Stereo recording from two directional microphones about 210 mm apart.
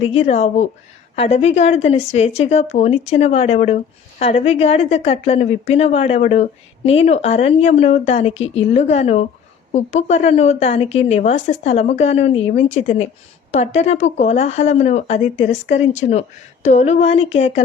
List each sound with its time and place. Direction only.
0.0 s a woman's voice: 30° left (ahead or behind)